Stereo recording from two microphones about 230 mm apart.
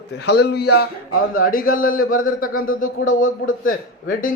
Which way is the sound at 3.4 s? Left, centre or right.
Left.